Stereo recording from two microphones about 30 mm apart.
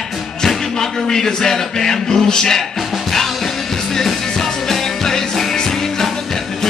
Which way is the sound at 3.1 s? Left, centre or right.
Centre.